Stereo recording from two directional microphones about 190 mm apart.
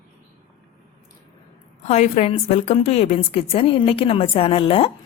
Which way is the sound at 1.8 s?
35° left (ahead or behind).